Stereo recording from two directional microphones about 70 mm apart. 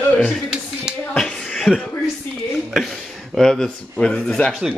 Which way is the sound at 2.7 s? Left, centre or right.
Centre.